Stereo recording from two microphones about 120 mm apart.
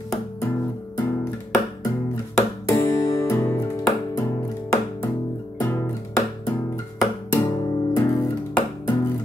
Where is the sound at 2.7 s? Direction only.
25° left (ahead or behind).